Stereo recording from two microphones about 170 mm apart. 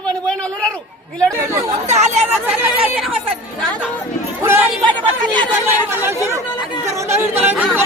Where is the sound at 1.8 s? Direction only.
40° right (ahead or behind).